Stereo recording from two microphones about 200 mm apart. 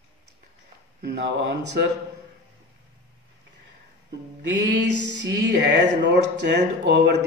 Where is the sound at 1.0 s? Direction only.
60° right (ahead or behind).